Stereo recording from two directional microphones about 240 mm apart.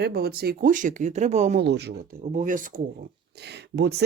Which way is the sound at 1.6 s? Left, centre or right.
Right.